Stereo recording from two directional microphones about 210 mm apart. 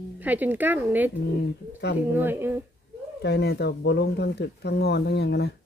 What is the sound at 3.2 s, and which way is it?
Speech, 50° left (ahead or behind).